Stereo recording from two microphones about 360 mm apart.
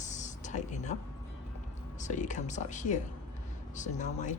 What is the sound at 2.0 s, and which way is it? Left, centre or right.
Speech, centre.